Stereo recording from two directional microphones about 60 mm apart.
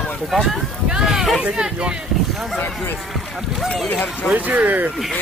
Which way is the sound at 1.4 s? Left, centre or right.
Centre.